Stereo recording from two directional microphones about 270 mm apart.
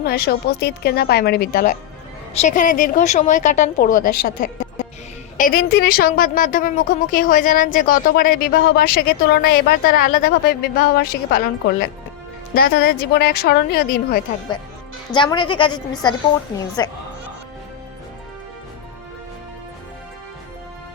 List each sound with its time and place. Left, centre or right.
0.0 s a woman's voice: left
15.1 s speech: centre